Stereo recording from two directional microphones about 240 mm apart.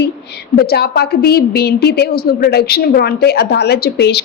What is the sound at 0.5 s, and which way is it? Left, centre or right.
A woman's voice, left.